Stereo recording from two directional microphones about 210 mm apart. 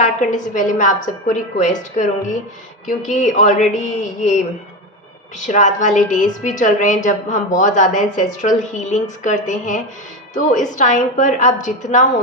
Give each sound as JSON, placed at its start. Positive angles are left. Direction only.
{"t": 0.0, "sound": "a woman's voice", "side_deg": 35}
{"t": 5.4, "sound": "a woman's voice", "side_deg": 35}